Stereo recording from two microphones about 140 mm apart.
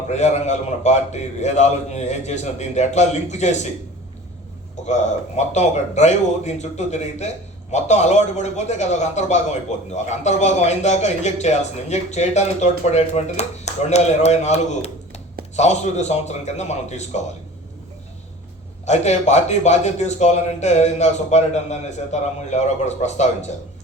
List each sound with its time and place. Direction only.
0.1 s a man's voice: 55° left (ahead or behind)
5.5 s a man's voice: 55° left (ahead or behind)
18.9 s a man's voice: 55° left (ahead or behind)